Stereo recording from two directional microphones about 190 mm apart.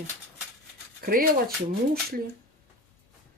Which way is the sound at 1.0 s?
50° right (ahead or behind).